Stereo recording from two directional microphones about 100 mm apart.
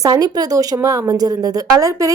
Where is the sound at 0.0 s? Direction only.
40° right (ahead or behind).